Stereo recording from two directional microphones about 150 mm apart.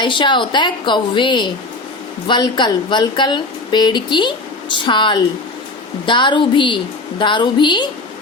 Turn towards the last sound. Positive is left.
turn(degrees=30)  # may be behind; listen again after turning